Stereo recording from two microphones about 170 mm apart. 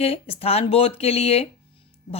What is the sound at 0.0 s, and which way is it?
Speech, 35° left (ahead or behind).